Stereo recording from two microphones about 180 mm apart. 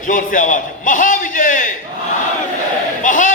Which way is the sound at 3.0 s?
45° left (ahead or behind).